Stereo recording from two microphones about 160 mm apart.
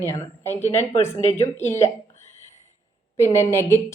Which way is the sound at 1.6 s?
15° left (ahead or behind).